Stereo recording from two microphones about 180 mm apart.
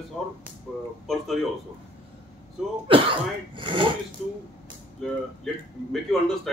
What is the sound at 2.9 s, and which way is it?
Speech, 30° right (ahead or behind).